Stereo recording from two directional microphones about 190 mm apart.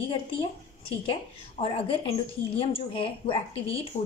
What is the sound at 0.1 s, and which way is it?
Speech, 30° left (ahead or behind).